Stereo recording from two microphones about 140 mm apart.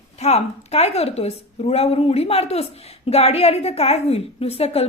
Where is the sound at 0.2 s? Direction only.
50° left (ahead or behind).